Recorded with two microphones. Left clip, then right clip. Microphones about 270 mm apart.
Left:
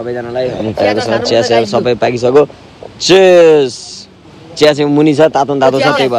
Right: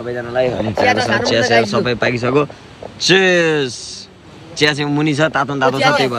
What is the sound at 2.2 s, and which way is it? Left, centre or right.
Speech, right.